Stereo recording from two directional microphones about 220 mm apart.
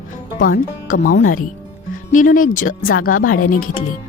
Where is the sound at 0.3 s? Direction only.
40° left (ahead or behind).